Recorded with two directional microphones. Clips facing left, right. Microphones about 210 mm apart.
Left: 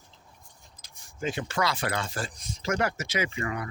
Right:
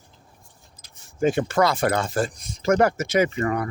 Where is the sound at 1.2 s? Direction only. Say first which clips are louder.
Right 9 dB; 50° right (ahead or behind).